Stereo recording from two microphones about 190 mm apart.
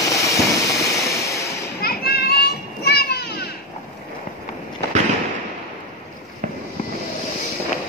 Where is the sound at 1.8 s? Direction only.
55° left (ahead or behind).